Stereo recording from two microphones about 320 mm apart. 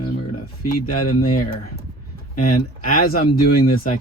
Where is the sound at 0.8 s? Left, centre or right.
Left.